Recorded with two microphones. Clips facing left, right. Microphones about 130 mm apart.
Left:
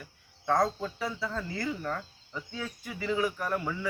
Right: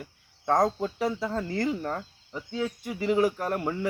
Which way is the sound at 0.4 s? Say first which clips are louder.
Right 3 dB; 45° right (ahead or behind).